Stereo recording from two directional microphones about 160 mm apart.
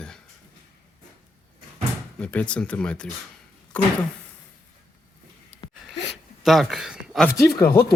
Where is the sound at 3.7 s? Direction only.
5° left (ahead or behind).